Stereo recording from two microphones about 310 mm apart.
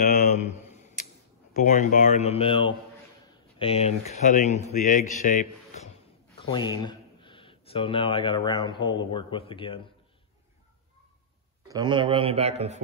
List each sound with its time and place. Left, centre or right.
0.0 s a sound: left
1.6 s speech: left
6.5 s speech: centre
11.6 s a man's voice: centre